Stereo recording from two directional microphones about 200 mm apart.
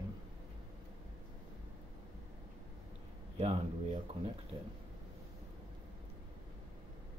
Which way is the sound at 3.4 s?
30° right (ahead or behind).